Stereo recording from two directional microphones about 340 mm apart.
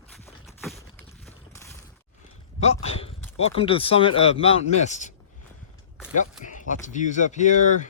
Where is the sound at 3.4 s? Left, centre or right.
Centre.